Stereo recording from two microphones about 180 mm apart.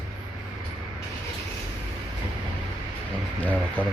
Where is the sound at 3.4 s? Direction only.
10° left (ahead or behind).